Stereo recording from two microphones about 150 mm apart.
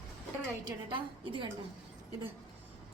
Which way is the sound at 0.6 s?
35° right (ahead or behind).